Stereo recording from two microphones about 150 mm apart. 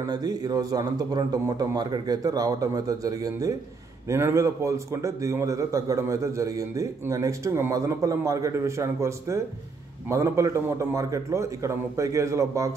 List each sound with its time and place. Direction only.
0.0 s a man's voice: 25° right (ahead or behind)